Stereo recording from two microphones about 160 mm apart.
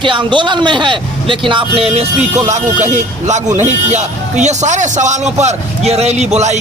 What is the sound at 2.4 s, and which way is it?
Speech, 50° right (ahead or behind).